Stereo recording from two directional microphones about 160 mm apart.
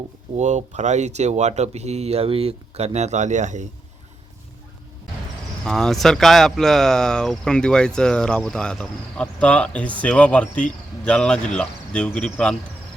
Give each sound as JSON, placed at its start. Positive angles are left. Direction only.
{"t": 0.3, "sound": "speech", "side_deg": -45}
{"t": 5.6, "sound": "speech", "side_deg": 5}